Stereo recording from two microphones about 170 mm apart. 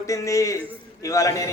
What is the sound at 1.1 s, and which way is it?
Speech, 20° left (ahead or behind).